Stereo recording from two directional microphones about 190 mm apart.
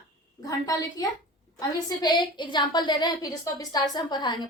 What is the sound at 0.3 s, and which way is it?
A woman's voice, 20° left (ahead or behind).